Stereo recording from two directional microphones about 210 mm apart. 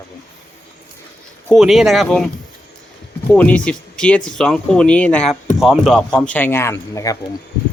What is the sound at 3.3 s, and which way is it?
Speech, 5° left (ahead or behind).